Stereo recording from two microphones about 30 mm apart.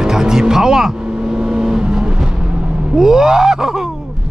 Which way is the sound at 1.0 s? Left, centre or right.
Right.